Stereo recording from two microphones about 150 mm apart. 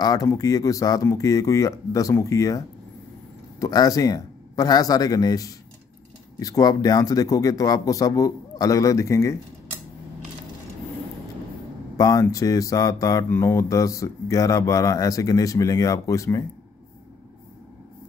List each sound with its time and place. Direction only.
0.0 s speech: 25° left (ahead or behind)
12.0 s speech: 25° left (ahead or behind)